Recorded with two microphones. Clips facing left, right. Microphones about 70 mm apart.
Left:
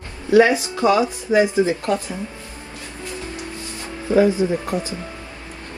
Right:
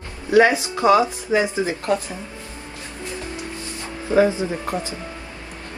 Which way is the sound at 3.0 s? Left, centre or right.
Right.